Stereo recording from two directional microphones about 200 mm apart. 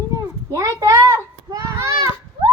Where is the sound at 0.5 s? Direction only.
15° right (ahead or behind).